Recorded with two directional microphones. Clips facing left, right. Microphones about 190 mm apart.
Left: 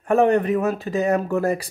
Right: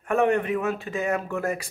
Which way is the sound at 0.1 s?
35° left (ahead or behind).